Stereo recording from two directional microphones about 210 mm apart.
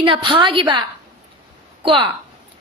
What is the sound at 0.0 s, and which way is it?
A woman's voice, 25° right (ahead or behind).